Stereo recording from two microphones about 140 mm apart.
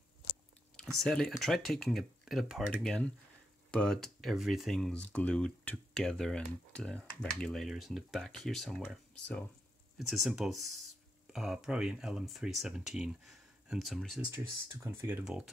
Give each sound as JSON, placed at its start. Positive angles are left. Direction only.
{"t": 0.7, "sound": "speech", "side_deg": 5}
{"t": 9.9, "sound": "speech", "side_deg": 0}
{"t": 14.3, "sound": "speech", "side_deg": -15}